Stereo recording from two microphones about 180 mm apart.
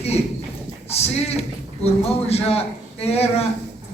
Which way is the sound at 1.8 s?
35° left (ahead or behind).